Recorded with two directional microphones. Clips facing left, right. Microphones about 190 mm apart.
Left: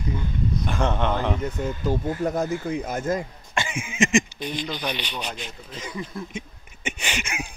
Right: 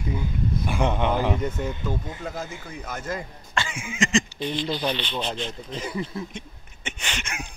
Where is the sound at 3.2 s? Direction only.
20° left (ahead or behind).